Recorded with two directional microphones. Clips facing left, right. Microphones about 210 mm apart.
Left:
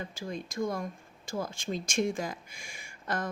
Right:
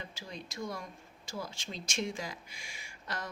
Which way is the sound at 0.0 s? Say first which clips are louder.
Left 7 dB; 50° left (ahead or behind).